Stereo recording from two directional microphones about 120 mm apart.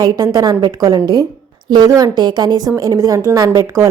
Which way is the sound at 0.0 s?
30° right (ahead or behind).